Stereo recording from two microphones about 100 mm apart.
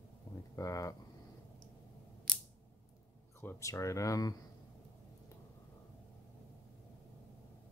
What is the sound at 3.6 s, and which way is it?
Speech, 30° left (ahead or behind).